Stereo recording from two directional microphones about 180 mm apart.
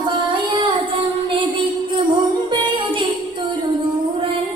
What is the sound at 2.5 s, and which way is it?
Music, 25° right (ahead or behind).